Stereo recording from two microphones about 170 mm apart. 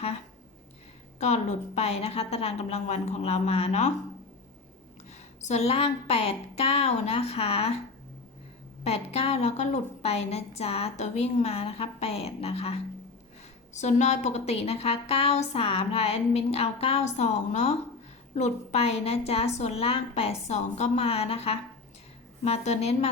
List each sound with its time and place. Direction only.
1.2 s a woman's voice: 40° left (ahead or behind)
5.4 s a woman's voice: 40° left (ahead or behind)
8.8 s a woman's voice: 35° left (ahead or behind)